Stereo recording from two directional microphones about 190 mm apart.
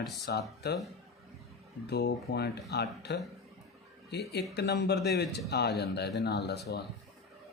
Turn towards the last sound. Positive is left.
turn(degrees=60)  # may be behind; listen again after turning